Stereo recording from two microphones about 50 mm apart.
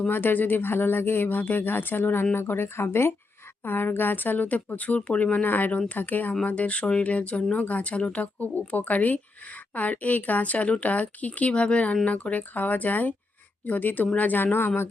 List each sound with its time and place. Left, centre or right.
0.1 s speech: left
3.6 s speech: left
6.4 s speech: left